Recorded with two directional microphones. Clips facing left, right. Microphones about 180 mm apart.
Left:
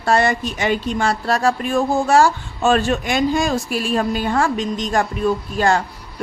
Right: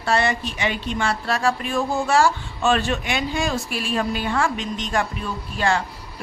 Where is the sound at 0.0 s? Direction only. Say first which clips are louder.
Left 4 dB; 45° left (ahead or behind).